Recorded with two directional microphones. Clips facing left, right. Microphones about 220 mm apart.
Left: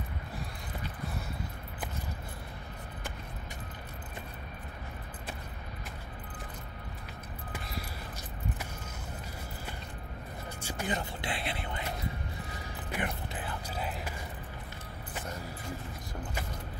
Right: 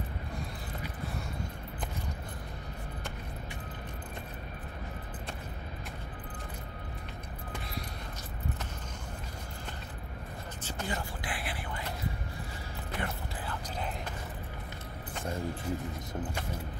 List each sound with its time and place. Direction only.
10.6 s vehicle: 10° left (ahead or behind)
11.0 s a sound: 25° left (ahead or behind)
12.9 s music: 15° left (ahead or behind)